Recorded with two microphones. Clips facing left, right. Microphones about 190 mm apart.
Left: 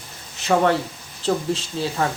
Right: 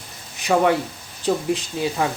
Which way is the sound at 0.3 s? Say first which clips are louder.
Even; 15° right (ahead or behind).